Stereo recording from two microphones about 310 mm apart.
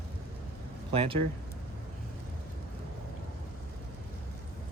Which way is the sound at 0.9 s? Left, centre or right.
Centre.